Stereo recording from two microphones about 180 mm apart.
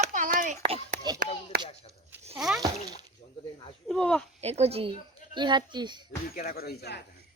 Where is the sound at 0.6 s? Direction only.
35° right (ahead or behind).